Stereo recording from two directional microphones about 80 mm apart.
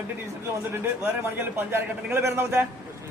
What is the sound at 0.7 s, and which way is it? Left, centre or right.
A man's voice, right.